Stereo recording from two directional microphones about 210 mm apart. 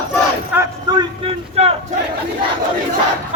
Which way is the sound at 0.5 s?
20° right (ahead or behind).